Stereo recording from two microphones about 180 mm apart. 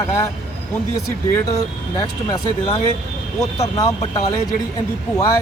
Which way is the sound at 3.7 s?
20° left (ahead or behind).